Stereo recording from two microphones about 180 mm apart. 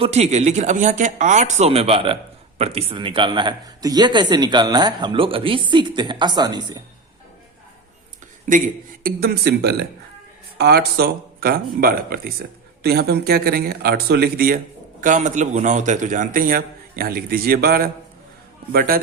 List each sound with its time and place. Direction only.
0.0 s speech: 35° right (ahead or behind)
8.4 s speech: 45° right (ahead or behind)
15.0 s a man's voice: 45° right (ahead or behind); by 18.9 s 60° right (ahead or behind)